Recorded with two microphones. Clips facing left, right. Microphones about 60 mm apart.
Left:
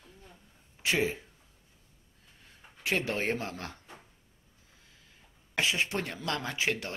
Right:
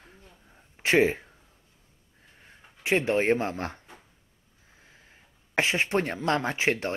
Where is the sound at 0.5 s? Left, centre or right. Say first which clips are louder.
Right 6 dB; right.